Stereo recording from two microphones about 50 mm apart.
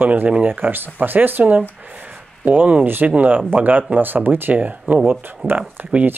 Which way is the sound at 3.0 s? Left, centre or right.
Right.